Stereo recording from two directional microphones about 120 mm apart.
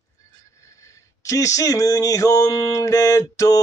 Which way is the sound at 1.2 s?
30° left (ahead or behind).